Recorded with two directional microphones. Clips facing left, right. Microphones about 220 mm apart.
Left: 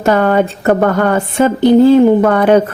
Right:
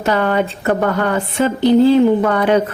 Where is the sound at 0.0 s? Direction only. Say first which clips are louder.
Left 5 dB; 45° left (ahead or behind).